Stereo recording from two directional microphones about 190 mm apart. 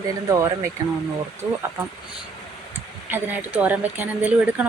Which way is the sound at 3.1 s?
10° right (ahead or behind).